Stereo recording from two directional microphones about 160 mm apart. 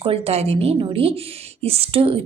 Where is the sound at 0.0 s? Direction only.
40° right (ahead or behind).